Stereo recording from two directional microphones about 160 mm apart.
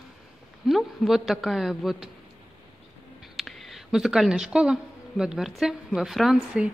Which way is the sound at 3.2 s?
Centre (ahead or behind).